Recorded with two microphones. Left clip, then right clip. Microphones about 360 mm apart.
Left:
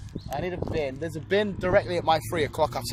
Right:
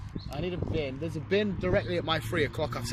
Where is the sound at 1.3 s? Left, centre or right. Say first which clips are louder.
Left 5 dB; centre.